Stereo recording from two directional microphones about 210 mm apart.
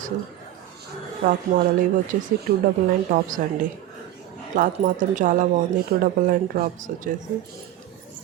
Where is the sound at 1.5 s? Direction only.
40° right (ahead or behind).